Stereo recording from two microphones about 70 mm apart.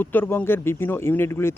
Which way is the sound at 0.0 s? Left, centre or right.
Left.